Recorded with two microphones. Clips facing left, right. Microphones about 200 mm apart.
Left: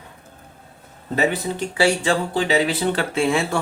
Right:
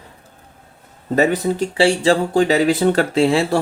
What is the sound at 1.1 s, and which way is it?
Speech, 40° right (ahead or behind).